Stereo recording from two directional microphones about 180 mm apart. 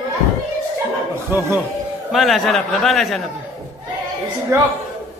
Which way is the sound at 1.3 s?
15° right (ahead or behind).